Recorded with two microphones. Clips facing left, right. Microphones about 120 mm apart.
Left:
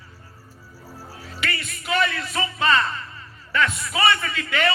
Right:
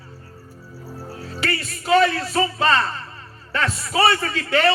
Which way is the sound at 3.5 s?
35° right (ahead or behind).